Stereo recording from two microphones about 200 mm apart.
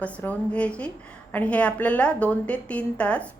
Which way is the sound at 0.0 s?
5° left (ahead or behind).